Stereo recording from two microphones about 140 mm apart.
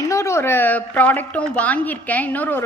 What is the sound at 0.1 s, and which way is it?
A woman's voice, 20° left (ahead or behind).